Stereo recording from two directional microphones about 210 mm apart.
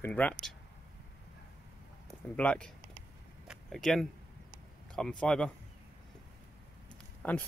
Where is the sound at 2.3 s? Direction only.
5° left (ahead or behind).